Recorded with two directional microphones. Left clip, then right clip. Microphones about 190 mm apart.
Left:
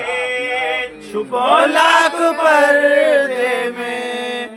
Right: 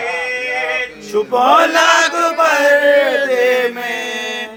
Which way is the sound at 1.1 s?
40° right (ahead or behind).